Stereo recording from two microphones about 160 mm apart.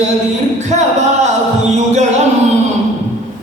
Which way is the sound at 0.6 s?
45° right (ahead or behind).